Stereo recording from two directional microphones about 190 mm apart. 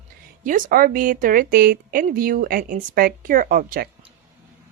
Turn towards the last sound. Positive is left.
turn(degrees=-50)  # may be behind; listen again after turning